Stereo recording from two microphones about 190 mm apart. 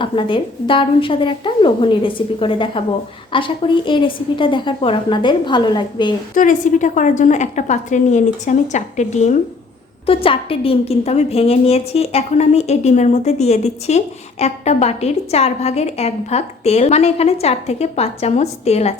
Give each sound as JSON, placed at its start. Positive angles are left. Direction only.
{"t": 0.0, "sound": "a woman's voice", "side_deg": 25}
{"t": 6.3, "sound": "a woman's voice", "side_deg": 45}